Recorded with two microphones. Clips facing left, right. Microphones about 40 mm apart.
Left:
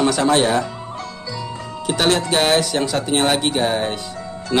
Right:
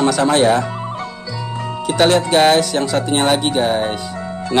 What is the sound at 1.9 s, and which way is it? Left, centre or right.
Speech, centre.